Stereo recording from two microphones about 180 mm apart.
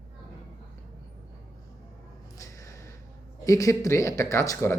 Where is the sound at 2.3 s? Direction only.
20° left (ahead or behind).